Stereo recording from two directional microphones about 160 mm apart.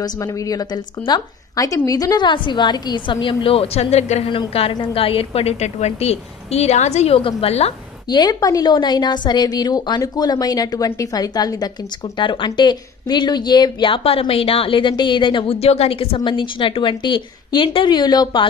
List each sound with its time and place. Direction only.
0.0 s a woman's voice: 20° left (ahead or behind); by 7.7 s 40° left (ahead or behind)
8.1 s a woman's voice: 25° left (ahead or behind)